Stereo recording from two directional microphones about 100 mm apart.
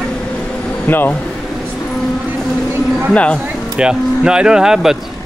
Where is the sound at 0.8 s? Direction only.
20° left (ahead or behind).